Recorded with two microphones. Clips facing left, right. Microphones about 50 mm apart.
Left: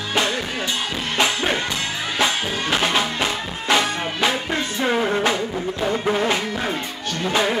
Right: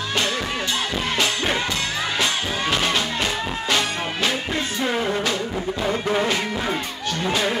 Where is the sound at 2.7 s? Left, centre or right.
Centre.